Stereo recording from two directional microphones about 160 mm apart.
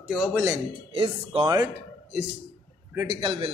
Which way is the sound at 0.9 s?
35° right (ahead or behind).